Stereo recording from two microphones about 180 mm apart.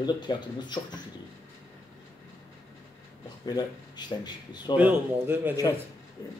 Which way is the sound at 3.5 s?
20° left (ahead or behind).